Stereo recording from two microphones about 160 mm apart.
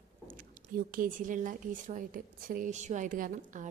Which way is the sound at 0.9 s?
60° right (ahead or behind).